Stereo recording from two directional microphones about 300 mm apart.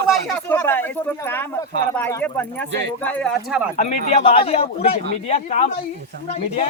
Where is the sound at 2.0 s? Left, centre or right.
Centre.